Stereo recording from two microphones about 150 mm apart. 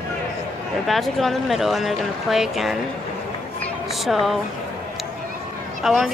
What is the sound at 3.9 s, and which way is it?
Speech, centre (ahead or behind).